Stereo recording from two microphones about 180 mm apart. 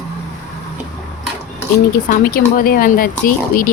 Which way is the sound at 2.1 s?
55° left (ahead or behind).